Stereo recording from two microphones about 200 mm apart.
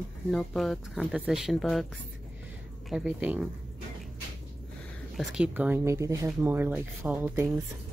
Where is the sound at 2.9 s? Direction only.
5° right (ahead or behind).